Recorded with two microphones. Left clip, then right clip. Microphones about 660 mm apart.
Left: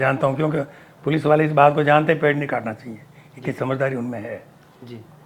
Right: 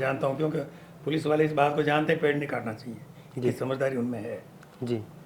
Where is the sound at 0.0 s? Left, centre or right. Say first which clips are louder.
Left 7 dB; left.